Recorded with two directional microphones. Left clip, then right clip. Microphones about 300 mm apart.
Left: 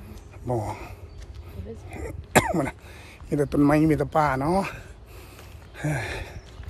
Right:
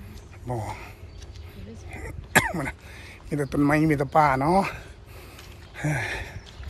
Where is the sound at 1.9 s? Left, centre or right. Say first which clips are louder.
Even; centre.